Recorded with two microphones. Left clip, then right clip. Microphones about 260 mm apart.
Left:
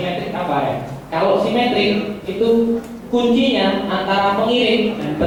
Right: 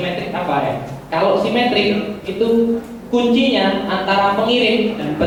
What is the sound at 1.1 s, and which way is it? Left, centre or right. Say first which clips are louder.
Speech: right 1 dB; centre.